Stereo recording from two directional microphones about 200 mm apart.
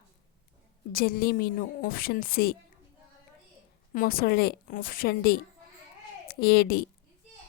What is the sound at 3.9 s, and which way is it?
A woman's voice, 45° left (ahead or behind).